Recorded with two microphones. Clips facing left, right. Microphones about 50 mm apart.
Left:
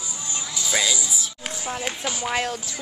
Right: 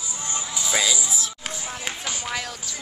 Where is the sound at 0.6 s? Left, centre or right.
Centre.